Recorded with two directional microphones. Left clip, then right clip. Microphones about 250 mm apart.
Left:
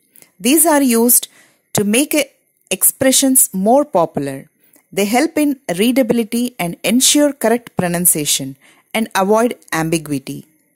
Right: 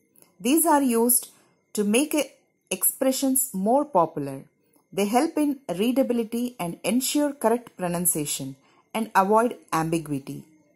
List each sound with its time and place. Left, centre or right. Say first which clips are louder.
0.7 s speech: left 7 dB; left